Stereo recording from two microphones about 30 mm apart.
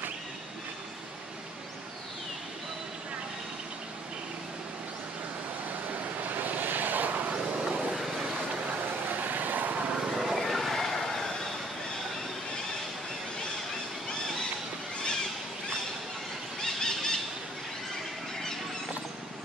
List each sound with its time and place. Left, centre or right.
6.1 s vehicle: right
7.2 s vehicle: right
7.9 s vehicle: centre
9.1 s vehicle: right
10.1 s vehicle: centre
10.4 s a sound: centre
16.6 s squeal: centre